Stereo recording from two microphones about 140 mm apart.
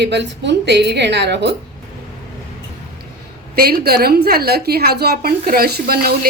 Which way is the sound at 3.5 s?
90° right.